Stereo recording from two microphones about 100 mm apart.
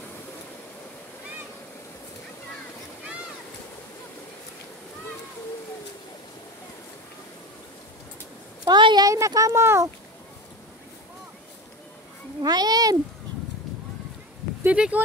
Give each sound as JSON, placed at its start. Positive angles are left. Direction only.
{"t": 8.6, "sound": "a sound", "side_deg": -45}
{"t": 9.1, "sound": "speech", "side_deg": -30}
{"t": 12.4, "sound": "speech", "side_deg": -40}
{"t": 14.6, "sound": "speech", "side_deg": -15}